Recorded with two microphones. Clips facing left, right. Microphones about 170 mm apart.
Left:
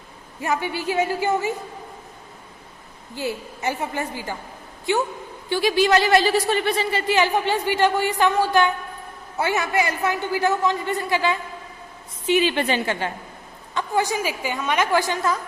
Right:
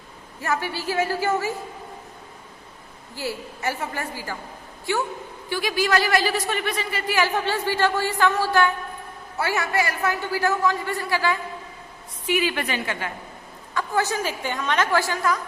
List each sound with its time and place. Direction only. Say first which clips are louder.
0.4 s a woman's voice: left 2 dB; 20° left (ahead or behind)
3.2 s a woman's voice: left 3 dB; 20° left (ahead or behind)
13.7 s a woman's voice: left 1 dB; 15° left (ahead or behind)